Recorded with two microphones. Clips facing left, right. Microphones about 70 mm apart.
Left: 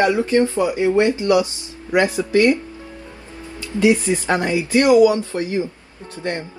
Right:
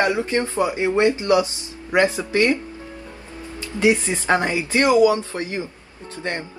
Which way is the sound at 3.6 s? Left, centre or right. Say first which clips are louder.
Left 2 dB; right.